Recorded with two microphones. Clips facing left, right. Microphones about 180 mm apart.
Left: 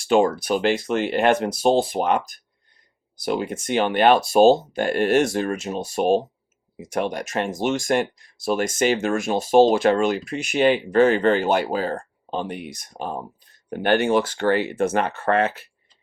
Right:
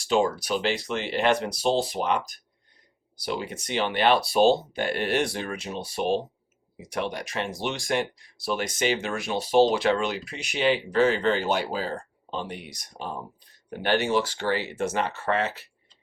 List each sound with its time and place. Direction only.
0.0 s speech: 55° left (ahead or behind)